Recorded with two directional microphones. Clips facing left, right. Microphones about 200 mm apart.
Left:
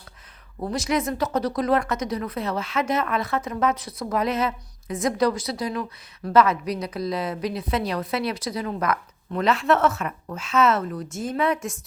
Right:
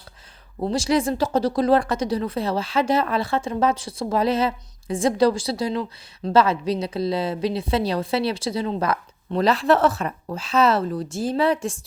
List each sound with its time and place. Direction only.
0.6 s a woman's voice: 30° right (ahead or behind)